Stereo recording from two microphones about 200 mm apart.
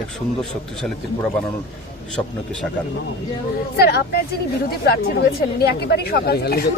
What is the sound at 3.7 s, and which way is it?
A woman's voice, 50° left (ahead or behind).